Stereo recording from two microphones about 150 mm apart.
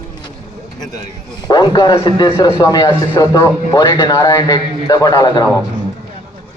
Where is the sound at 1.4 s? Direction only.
25° left (ahead or behind).